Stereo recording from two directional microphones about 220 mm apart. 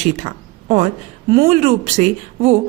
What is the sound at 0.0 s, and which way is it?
A woman's voice, 30° right (ahead or behind).